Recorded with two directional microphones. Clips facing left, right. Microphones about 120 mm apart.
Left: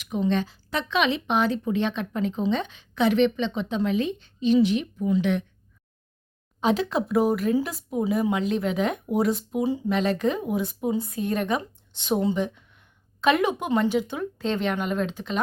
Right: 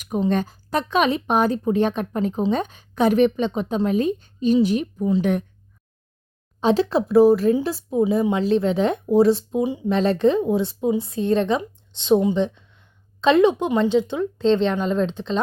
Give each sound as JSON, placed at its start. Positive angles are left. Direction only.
{"t": 0.0, "sound": "speech", "side_deg": -45}
{"t": 5.2, "sound": "speech", "side_deg": -45}
{"t": 6.6, "sound": "speech", "side_deg": -35}